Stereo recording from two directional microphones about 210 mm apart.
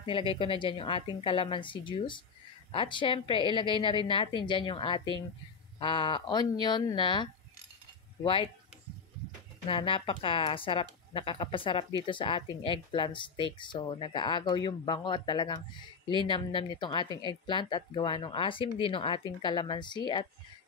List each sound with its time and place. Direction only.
0.3 s a woman's voice: 25° left (ahead or behind)
9.7 s a woman's voice: 25° left (ahead or behind)